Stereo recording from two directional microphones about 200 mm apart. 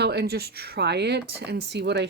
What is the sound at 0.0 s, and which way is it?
Speech, 55° right (ahead or behind).